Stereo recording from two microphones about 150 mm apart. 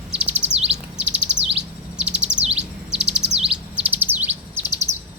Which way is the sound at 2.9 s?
5° right (ahead or behind).